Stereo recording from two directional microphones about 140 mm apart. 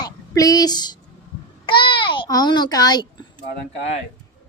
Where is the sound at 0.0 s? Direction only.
25° left (ahead or behind).